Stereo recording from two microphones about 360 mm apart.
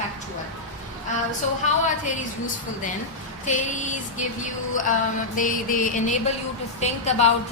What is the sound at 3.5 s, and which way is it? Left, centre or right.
Speech, left.